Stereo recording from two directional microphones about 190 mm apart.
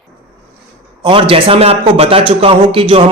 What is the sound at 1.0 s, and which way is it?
A man's voice, 25° right (ahead or behind).